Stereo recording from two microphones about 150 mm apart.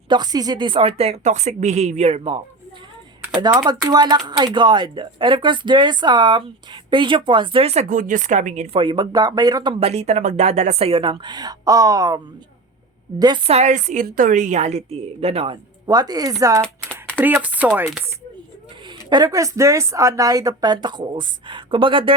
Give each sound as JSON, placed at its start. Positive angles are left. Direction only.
{"t": 0.1, "sound": "a woman's voice", "side_deg": -25}
{"t": 3.4, "sound": "a woman's voice", "side_deg": -30}
{"t": 7.9, "sound": "a woman's voice", "side_deg": -60}
{"t": 9.8, "sound": "a woman's voice", "side_deg": -45}
{"t": 13.5, "sound": "a woman's voice", "side_deg": -50}
{"t": 15.9, "sound": "speech", "side_deg": -25}
{"t": 16.9, "sound": "shuffling cards", "side_deg": 10}
{"t": 17.2, "sound": "speech", "side_deg": -10}
{"t": 19.1, "sound": "speech", "side_deg": -25}